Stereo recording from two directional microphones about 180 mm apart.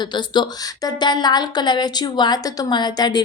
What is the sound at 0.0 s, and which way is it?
Speech, 25° left (ahead or behind).